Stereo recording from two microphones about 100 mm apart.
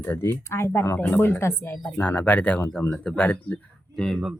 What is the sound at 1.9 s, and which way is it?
Speech, 15° left (ahead or behind).